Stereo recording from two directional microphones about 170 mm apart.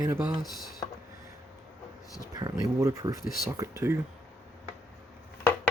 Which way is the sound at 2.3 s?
20° right (ahead or behind).